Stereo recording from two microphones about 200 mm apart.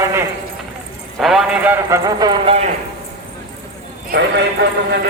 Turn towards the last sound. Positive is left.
turn(degrees=-55)  # may be behind; listen again after turning